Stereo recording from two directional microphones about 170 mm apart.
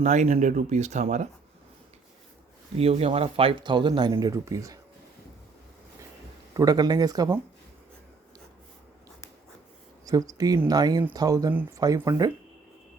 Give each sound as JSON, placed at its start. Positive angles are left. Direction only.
{"t": 0.0, "sound": "speech", "side_deg": -45}
{"t": 2.7, "sound": "speech", "side_deg": -35}
{"t": 6.5, "sound": "speech", "side_deg": -20}
{"t": 10.1, "sound": "speech", "side_deg": -20}